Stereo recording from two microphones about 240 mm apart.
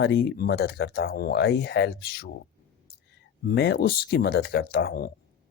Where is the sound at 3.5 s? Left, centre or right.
Left.